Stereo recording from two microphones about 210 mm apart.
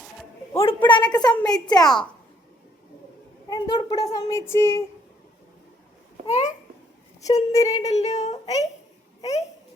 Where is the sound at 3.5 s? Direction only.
20° left (ahead or behind).